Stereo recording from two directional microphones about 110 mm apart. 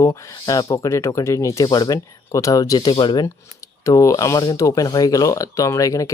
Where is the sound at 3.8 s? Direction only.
30° left (ahead or behind).